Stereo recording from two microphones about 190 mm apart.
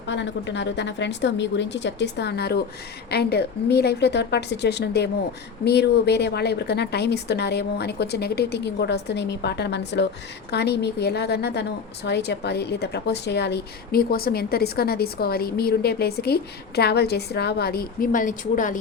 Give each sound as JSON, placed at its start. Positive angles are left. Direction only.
{"t": 0.1, "sound": "a woman's voice", "side_deg": 70}